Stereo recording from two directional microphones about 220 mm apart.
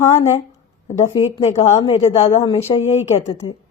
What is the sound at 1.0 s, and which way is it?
Speech, 15° left (ahead or behind).